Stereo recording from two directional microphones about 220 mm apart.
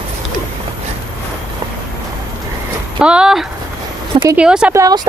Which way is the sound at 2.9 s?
5° right (ahead or behind).